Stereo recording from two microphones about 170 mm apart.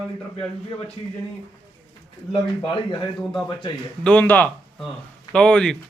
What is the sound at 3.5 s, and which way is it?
Speech, 25° left (ahead or behind).